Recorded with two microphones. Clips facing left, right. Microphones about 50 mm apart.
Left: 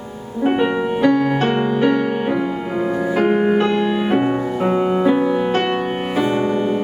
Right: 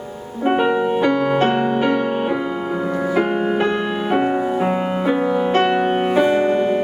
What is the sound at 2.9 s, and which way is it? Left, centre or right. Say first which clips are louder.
Music: left 2 dB; centre.